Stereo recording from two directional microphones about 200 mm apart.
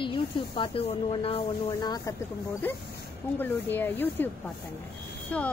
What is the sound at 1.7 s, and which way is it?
Speech, 15° left (ahead or behind).